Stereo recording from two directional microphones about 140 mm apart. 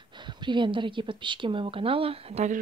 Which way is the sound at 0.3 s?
35° right (ahead or behind).